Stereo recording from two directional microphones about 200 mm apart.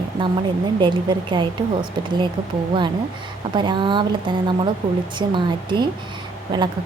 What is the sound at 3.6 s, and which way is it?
A woman's voice, 25° right (ahead or behind).